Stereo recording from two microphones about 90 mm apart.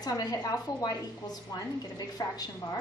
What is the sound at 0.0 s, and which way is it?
A woman's voice, 45° left (ahead or behind).